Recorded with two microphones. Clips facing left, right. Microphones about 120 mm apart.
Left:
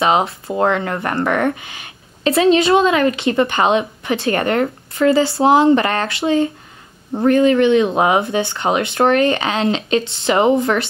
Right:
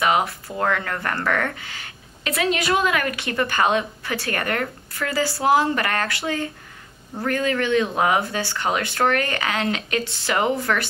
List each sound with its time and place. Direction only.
0.0 s a woman's voice: 25° left (ahead or behind)